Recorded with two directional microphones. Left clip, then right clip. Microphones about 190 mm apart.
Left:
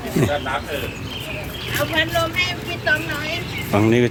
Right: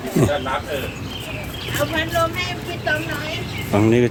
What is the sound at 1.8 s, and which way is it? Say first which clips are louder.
Speech: even; 50° right (ahead or behind).